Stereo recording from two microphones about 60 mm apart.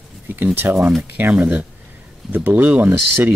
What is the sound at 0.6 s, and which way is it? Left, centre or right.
Speech, right.